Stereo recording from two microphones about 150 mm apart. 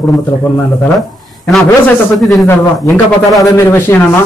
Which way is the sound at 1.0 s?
Centre (ahead or behind).